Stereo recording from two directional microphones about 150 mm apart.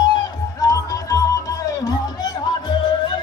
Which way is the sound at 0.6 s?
25° left (ahead or behind).